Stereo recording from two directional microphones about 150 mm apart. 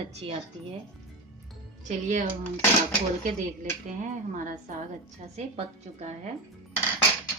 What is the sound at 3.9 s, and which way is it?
Speech, 55° right (ahead or behind).